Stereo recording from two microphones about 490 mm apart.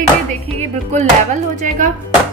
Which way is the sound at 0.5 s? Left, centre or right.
Centre.